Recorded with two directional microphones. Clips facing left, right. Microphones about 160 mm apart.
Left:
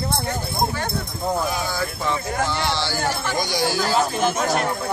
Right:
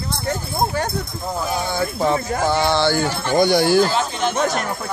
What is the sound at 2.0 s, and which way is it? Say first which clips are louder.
Speech: right 5 dB; 45° right (ahead or behind).